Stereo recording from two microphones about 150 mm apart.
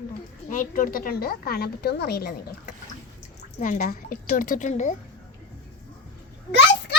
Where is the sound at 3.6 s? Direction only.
60° left (ahead or behind).